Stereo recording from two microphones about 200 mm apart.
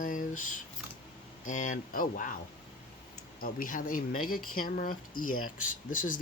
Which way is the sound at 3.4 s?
45° left (ahead or behind).